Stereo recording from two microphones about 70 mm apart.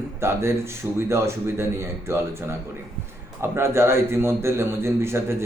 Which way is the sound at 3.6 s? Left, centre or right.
Right.